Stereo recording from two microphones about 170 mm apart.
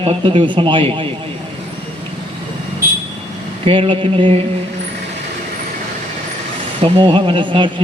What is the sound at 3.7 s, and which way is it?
Speech, 30° right (ahead or behind).